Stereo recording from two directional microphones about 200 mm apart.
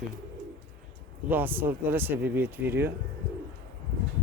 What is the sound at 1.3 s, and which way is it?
Speech, 10° right (ahead or behind).